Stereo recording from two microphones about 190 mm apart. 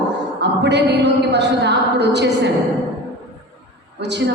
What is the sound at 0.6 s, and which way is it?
A woman's voice, 65° right (ahead or behind).